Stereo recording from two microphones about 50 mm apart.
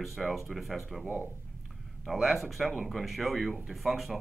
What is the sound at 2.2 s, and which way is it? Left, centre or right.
Speech, centre.